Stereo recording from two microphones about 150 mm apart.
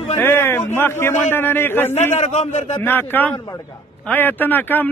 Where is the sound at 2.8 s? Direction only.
15° left (ahead or behind).